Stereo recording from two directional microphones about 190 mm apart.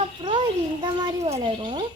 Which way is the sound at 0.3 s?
25° right (ahead or behind).